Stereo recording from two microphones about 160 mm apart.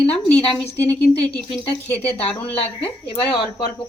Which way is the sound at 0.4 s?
35° left (ahead or behind).